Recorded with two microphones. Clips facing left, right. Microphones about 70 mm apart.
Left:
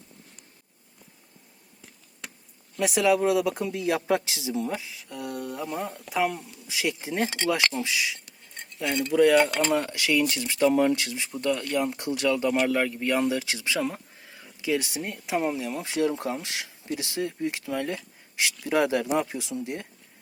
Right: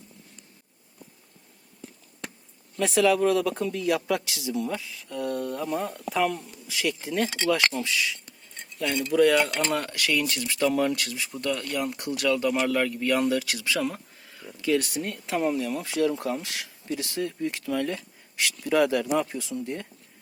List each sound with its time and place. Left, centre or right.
2.7 s speech: centre
3.7 s speech: left
5.0 s speech: centre
6.7 s speech: left